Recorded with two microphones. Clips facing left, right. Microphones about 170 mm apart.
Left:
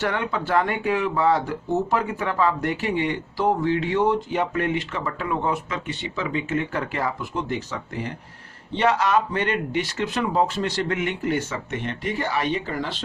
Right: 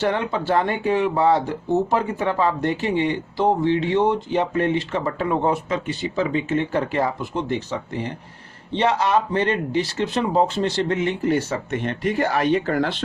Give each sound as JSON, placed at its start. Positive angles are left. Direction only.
{"t": 0.0, "sound": "speech", "side_deg": -30}